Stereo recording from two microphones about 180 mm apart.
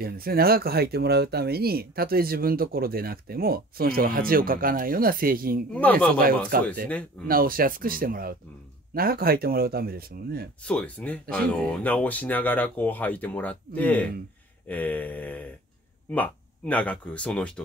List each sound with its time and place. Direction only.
0.0 s speech: 55° right (ahead or behind)
5.7 s speech: 10° left (ahead or behind)
6.5 s speech: 55° right (ahead or behind)
10.6 s speech: 5° left (ahead or behind)